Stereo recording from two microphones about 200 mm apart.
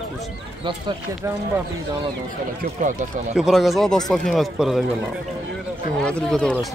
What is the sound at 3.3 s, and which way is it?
Speech, centre (ahead or behind).